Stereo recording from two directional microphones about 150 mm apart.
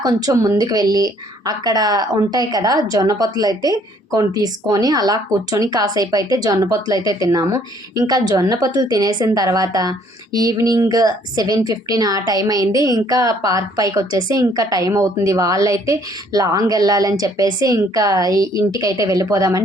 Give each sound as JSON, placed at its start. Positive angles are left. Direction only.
{"t": 0.0, "sound": "speech", "side_deg": -20}